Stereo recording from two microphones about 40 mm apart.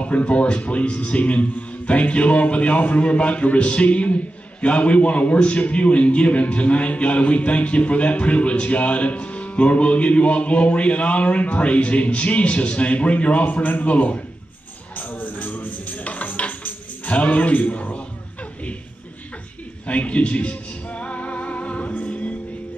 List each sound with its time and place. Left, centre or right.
0.0 s speech: left
15.0 s music: left
19.9 s music: left